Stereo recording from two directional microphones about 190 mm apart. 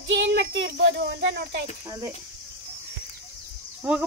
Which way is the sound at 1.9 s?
15° right (ahead or behind).